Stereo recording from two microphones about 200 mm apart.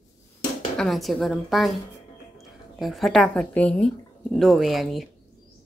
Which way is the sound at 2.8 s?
Centre (ahead or behind).